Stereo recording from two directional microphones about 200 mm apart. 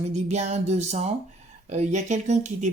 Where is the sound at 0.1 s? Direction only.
35° right (ahead or behind).